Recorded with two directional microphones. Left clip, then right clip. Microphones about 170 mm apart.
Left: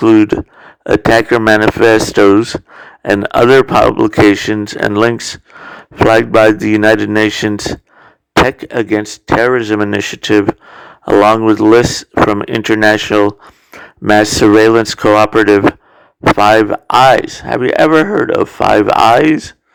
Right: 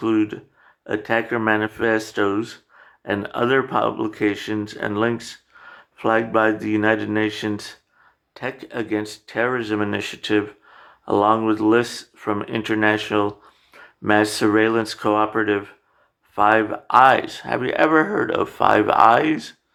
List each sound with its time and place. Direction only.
0.0 s speech: 50° left (ahead or behind)
17.2 s speech: 40° left (ahead or behind)